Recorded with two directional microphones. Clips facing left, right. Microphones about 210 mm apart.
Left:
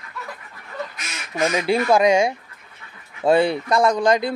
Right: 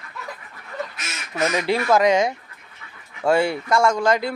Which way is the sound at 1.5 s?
15° left (ahead or behind).